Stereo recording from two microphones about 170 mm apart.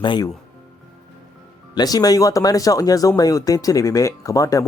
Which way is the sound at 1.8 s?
20° left (ahead or behind).